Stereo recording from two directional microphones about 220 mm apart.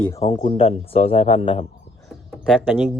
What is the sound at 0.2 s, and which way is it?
A man's voice, 25° left (ahead or behind).